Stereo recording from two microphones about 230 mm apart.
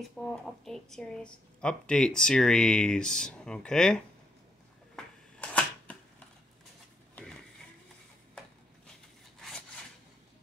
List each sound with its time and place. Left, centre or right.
0.2 s speech: centre
4.9 s shuffling cards: centre
7.2 s a sound: centre